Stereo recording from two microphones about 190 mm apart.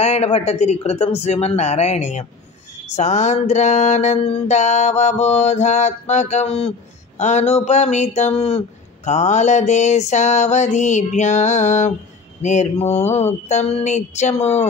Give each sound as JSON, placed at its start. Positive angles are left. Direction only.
{"t": 0.0, "sound": "speech", "side_deg": 35}